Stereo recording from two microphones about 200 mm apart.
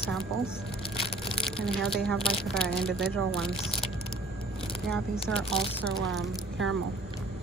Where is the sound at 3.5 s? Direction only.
25° left (ahead or behind).